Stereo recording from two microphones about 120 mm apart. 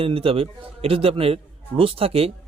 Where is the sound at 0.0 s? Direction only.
50° right (ahead or behind).